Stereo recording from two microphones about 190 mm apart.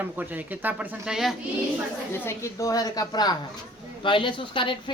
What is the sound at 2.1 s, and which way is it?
A woman's voice, 15° left (ahead or behind).